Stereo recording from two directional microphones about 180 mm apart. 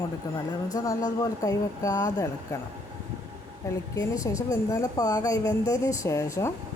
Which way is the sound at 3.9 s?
20° left (ahead or behind).